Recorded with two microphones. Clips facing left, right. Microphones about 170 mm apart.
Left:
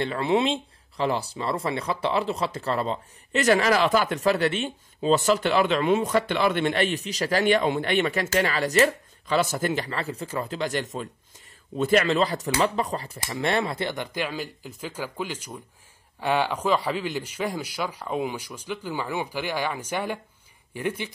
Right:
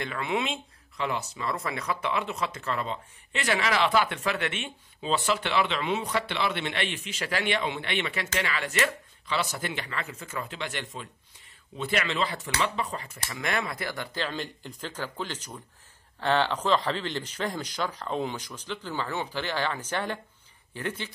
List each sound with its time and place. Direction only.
0.0 s speech: 35° left (ahead or behind)
14.1 s a man's voice: 10° left (ahead or behind)